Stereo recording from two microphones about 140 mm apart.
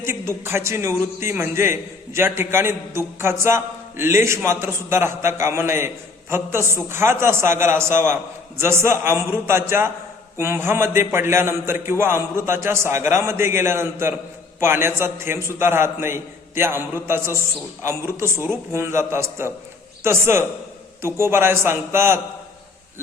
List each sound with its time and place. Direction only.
0.0 s a man's voice: 20° right (ahead or behind)